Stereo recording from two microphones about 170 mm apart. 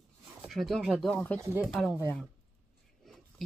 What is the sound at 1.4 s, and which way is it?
Speech, 15° right (ahead or behind).